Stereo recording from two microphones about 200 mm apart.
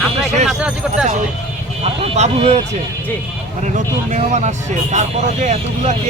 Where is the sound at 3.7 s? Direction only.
35° right (ahead or behind).